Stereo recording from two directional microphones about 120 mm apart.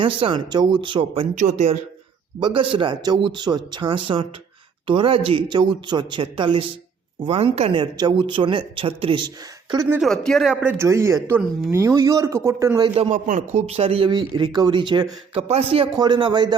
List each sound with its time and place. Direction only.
0.0 s speech: 45° right (ahead or behind)
1.4 s speech: 75° right (ahead or behind)
2.4 s speech: 45° right (ahead or behind)
7.3 s a man's voice: 55° right (ahead or behind)
7.8 s speech: 35° right (ahead or behind)
10.0 s speech: 5° left (ahead or behind)
10.5 s speech: 15° right (ahead or behind)
13.0 s a man's voice: 80° right; by 14.1 s 55° right (ahead or behind)
14.1 s speech: 40° right (ahead or behind)
15.4 s a man's voice: 60° right (ahead or behind)
16.0 s speech: 40° right (ahead or behind)